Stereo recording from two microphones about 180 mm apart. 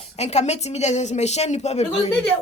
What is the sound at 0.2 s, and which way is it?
A woman's voice, 40° left (ahead or behind).